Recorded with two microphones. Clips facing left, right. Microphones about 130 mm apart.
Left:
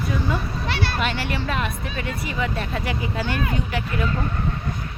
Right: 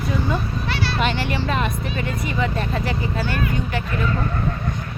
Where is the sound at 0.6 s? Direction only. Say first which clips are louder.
Left 1 dB; 55° left (ahead or behind).